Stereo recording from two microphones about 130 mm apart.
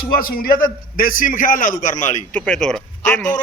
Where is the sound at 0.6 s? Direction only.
90° left; by 2.2 s 70° left (ahead or behind).